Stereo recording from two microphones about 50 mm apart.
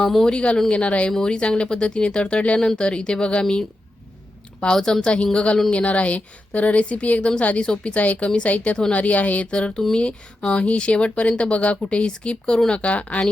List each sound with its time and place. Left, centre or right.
0.1 s a woman's voice: centre
0.3 s speech: centre
4.6 s a woman's voice: centre
7.9 s a woman's voice: left
12.8 s speech: left